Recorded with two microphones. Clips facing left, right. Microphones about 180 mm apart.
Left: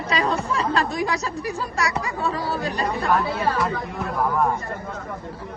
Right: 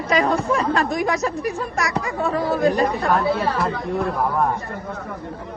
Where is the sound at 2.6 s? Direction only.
30° right (ahead or behind).